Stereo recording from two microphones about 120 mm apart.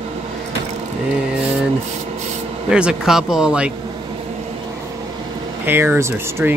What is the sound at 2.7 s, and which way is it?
Speech, 5° right (ahead or behind).